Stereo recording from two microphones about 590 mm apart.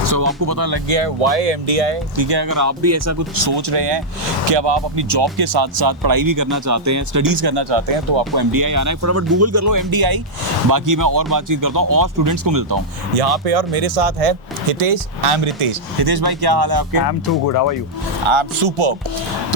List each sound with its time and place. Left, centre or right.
0.0 s speech: right
0.9 s speech: right
1.2 s speech: right
2.1 s speech: right
3.4 s speech: right
8.3 s speech: right
13.1 s speech: right
16.0 s speech: right
17.0 s speech: left
18.3 s speech: right